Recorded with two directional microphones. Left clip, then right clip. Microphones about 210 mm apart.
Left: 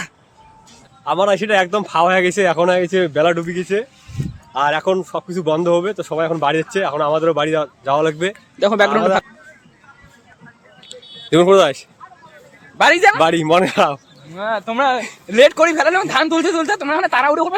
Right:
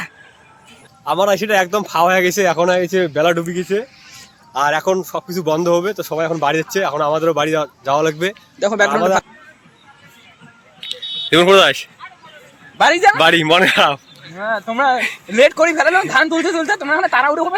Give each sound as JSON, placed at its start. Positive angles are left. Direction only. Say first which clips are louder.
{"t": 1.0, "sound": "speech", "louder": "even", "side_deg": 0}
{"t": 3.4, "sound": "speech", "louder": "even", "side_deg": -50}
{"t": 4.5, "sound": "speech", "louder": "right 1 dB", "side_deg": 5}
{"t": 8.5, "sound": "speech", "louder": "left 1 dB", "side_deg": 20}
{"t": 11.3, "sound": "speech", "louder": "right 1 dB", "side_deg": 5}
{"t": 12.8, "sound": "speech", "louder": "even", "side_deg": 25}
{"t": 13.1, "sound": "speech", "louder": "right 2 dB", "side_deg": 5}
{"t": 14.3, "sound": "speech", "louder": "even", "side_deg": 25}
{"t": 14.9, "sound": "speech", "louder": "right 4 dB", "side_deg": 5}
{"t": 15.3, "sound": "speech", "louder": "left 1 dB", "side_deg": 25}